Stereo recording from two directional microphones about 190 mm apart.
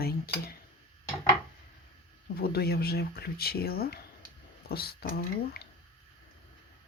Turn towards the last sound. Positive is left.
turn(degrees=55)  # may be behind; listen again after turning